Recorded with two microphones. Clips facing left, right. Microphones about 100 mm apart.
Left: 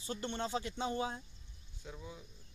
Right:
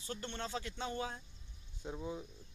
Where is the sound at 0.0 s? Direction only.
15° left (ahead or behind).